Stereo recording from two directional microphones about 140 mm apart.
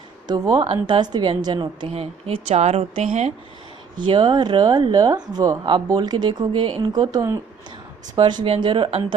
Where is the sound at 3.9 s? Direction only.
35° right (ahead or behind).